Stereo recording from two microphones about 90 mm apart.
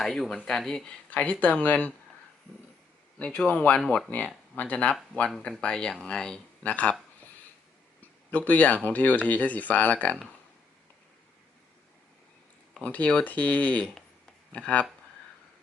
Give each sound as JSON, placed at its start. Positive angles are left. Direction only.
{"t": 0.0, "sound": "speech", "side_deg": 5}
{"t": 3.2, "sound": "speech", "side_deg": 15}
{"t": 3.8, "sound": "speech", "side_deg": 0}
{"t": 4.5, "sound": "speech", "side_deg": 20}
{"t": 8.0, "sound": "speech", "side_deg": 20}
{"t": 12.8, "sound": "speech", "side_deg": 15}